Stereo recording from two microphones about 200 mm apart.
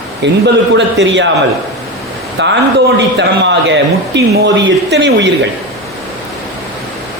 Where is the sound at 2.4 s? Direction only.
65° right (ahead or behind).